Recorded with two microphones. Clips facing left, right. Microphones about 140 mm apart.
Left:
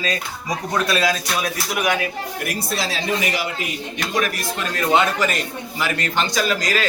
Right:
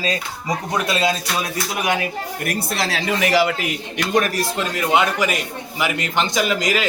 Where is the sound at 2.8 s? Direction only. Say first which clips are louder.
Right 1 dB; 80° right.